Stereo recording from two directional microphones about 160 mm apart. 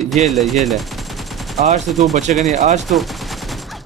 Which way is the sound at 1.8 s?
Centre (ahead or behind).